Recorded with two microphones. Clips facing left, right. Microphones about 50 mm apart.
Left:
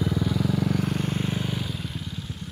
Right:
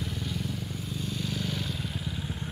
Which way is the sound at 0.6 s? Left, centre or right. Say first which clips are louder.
Left 12 dB; left.